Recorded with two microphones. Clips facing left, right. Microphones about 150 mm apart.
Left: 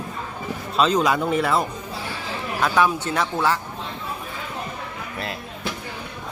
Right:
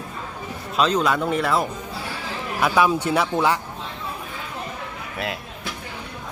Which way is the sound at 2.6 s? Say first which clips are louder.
Right 1 dB; 10° right (ahead or behind).